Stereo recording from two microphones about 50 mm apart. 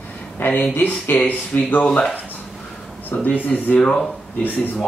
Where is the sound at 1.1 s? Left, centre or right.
Left.